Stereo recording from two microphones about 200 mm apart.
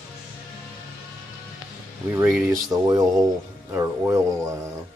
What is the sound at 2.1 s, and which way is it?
Speech, 15° right (ahead or behind).